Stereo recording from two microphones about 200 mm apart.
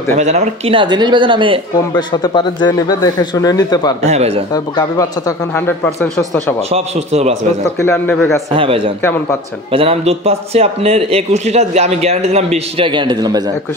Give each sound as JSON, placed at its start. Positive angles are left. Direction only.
{"t": 0.1, "sound": "a man's voice", "side_deg": -35}
{"t": 2.0, "sound": "speech", "side_deg": 20}
{"t": 4.0, "sound": "a man's voice", "side_deg": -35}
{"t": 4.7, "sound": "speech", "side_deg": 15}
{"t": 5.9, "sound": "speech", "side_deg": 5}
{"t": 6.7, "sound": "a man's voice", "side_deg": -30}
{"t": 7.8, "sound": "speech", "side_deg": 10}
{"t": 8.5, "sound": "a man's voice", "side_deg": -25}
{"t": 9.0, "sound": "speech", "side_deg": 10}
{"t": 9.7, "sound": "a man's voice", "side_deg": -30}